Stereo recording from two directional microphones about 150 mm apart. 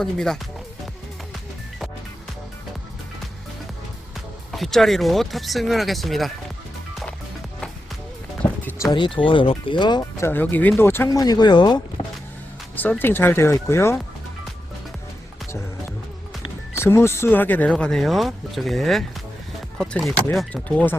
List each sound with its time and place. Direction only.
0.0 s speech: 5° left (ahead or behind)
4.5 s speech: centre (ahead or behind)
8.9 s speech: 30° left (ahead or behind)
10.2 s speech: 15° left (ahead or behind); by 11.8 s 30° left (ahead or behind)
12.7 s speech: 10° left (ahead or behind)
16.7 s speech: 15° left (ahead or behind)